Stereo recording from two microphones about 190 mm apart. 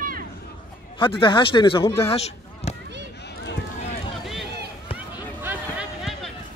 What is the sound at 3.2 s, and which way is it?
Run, 65° left (ahead or behind).